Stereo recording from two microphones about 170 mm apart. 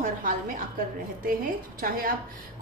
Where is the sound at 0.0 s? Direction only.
50° right (ahead or behind).